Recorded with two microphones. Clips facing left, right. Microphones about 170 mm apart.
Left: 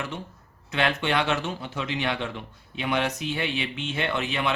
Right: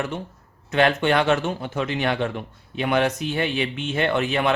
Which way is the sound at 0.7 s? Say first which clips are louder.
Right 6 dB; 45° right (ahead or behind).